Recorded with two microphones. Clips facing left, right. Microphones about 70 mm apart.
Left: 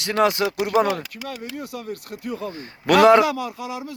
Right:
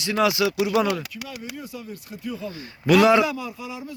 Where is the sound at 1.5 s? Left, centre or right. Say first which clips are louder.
Left 4 dB; left.